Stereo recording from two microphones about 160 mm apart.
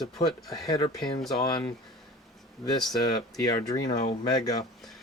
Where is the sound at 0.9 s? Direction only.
Centre (ahead or behind).